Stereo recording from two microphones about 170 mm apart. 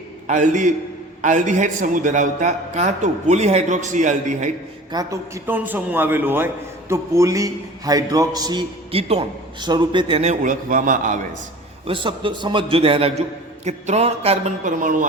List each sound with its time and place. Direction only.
0.3 s a man's voice: 45° right (ahead or behind)
4.9 s a man's voice: 20° right (ahead or behind)
5.5 s a man's voice: 10° right (ahead or behind); by 11.3 s 50° right (ahead or behind)
11.9 s a man's voice: 30° right (ahead or behind); by 15.0 s 50° right (ahead or behind)